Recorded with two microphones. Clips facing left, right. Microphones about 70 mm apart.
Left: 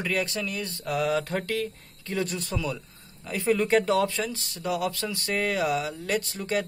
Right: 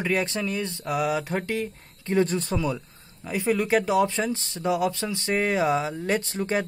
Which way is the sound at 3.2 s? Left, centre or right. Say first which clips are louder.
Even; centre.